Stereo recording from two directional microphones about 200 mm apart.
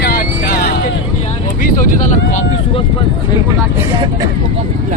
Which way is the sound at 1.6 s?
40° left (ahead or behind).